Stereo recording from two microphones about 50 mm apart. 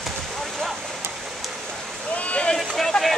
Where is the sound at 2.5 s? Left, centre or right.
Centre.